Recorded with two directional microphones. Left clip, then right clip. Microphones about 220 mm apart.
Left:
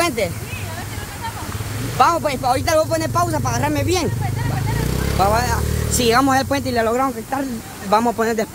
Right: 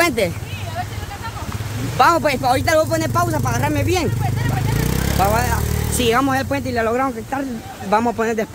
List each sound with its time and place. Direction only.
0.0 s a sound: 10° right (ahead or behind)
2.0 s speech: 15° right (ahead or behind); by 4.1 s centre (ahead or behind)
5.2 s speech: 5° left (ahead or behind)